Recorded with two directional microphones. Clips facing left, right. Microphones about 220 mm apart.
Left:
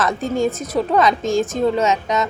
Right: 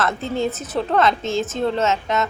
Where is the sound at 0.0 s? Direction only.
15° left (ahead or behind).